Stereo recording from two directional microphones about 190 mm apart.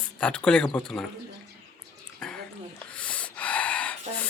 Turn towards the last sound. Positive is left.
turn(degrees=5)  # may be behind; listen again after turning